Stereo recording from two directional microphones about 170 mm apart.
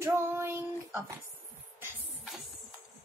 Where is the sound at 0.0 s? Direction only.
15° right (ahead or behind).